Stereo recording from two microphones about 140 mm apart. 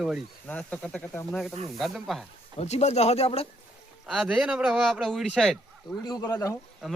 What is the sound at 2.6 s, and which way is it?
Speech, 50° left (ahead or behind).